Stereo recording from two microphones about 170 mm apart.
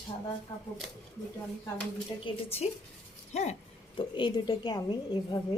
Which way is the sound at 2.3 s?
30° left (ahead or behind).